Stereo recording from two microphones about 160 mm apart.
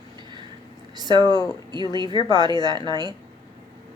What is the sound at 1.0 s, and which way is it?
Speech, 25° right (ahead or behind).